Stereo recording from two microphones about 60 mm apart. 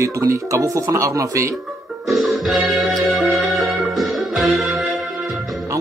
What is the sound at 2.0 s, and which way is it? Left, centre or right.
Music, centre.